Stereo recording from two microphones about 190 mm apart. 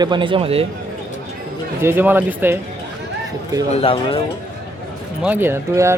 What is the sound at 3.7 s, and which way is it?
Speech, 30° left (ahead or behind).